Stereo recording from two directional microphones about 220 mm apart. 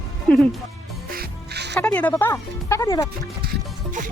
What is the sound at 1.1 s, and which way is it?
Music, 45° right (ahead or behind).